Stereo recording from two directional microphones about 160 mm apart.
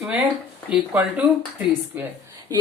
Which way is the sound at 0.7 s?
10° right (ahead or behind).